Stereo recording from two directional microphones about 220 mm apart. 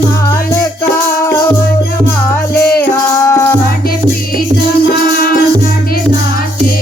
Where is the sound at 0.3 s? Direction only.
15° left (ahead or behind).